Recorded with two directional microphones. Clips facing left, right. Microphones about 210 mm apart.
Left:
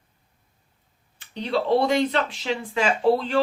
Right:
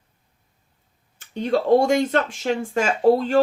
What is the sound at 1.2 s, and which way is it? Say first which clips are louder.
Speech: right 4 dB; 45° right (ahead or behind).